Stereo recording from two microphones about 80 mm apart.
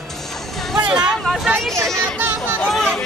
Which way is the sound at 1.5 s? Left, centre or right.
Right.